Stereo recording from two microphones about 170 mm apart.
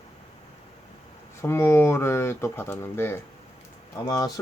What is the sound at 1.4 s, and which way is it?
Speech, 15° left (ahead or behind).